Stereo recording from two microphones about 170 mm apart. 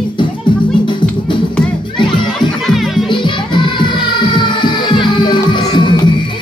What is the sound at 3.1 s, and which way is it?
Music, 30° left (ahead or behind).